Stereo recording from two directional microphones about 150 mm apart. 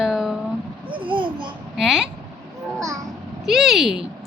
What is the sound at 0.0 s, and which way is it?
Vehicle, 5° right (ahead or behind).